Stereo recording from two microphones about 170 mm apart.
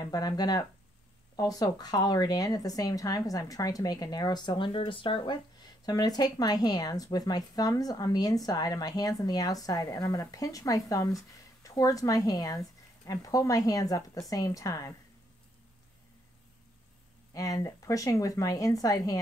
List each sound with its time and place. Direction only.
0.0 s speech: 25° left (ahead or behind)
17.3 s speech: 20° left (ahead or behind)